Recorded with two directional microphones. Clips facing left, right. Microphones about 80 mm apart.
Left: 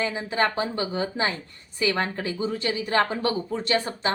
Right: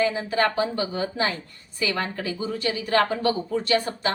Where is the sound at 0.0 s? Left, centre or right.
Left.